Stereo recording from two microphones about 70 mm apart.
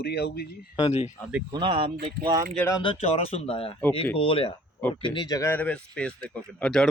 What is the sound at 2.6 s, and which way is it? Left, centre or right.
Speech, centre.